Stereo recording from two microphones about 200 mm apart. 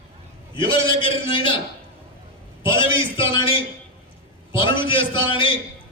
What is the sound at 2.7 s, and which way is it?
A man's voice, 25° left (ahead or behind).